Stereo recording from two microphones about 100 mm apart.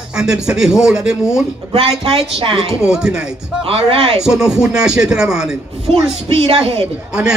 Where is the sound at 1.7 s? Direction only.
70° right (ahead or behind).